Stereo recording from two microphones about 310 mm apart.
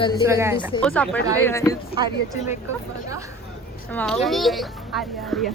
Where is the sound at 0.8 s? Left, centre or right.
Centre.